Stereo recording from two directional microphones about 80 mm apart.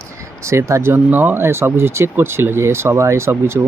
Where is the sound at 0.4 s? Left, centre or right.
Right.